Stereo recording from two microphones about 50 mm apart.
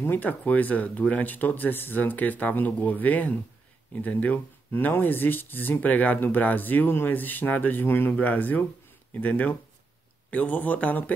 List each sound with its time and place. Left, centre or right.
0.0 s speech: left
4.7 s speech: left